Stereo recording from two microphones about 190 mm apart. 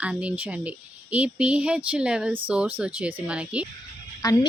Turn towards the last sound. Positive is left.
turn(degrees=20)  # may be behind; listen again after turning